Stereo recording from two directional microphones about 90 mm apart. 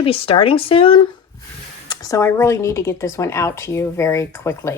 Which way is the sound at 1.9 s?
40° left (ahead or behind).